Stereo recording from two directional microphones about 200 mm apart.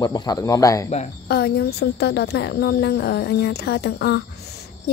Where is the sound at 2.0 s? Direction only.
55° left (ahead or behind).